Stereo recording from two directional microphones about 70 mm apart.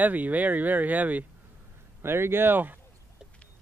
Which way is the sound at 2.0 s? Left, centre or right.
Right.